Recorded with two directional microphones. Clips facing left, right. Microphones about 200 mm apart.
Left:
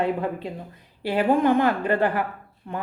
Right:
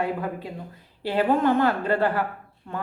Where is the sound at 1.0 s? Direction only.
15° left (ahead or behind).